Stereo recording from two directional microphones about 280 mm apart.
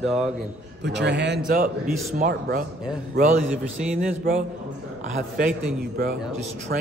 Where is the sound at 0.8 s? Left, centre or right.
Right.